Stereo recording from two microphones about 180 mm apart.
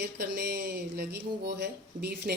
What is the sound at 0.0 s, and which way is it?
Speech, 60° right (ahead or behind).